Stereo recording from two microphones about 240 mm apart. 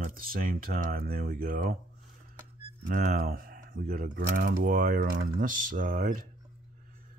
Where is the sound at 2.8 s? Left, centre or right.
Right.